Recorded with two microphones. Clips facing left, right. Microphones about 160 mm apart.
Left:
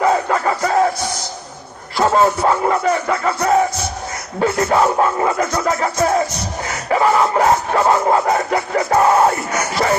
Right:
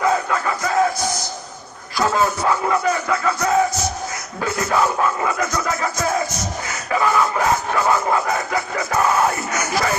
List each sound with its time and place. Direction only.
0.0 s music: 35° left (ahead or behind)
2.0 s music: 30° left (ahead or behind)